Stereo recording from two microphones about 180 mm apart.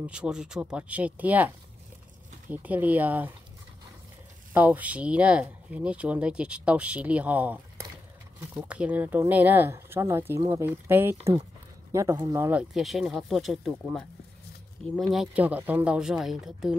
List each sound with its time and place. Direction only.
0.0 s speech: 5° right (ahead or behind)
2.5 s speech: 10° right (ahead or behind)
4.6 s speech: 10° right (ahead or behind)